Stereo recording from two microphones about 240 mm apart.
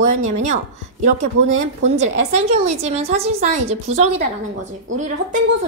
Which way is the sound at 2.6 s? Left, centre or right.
Right.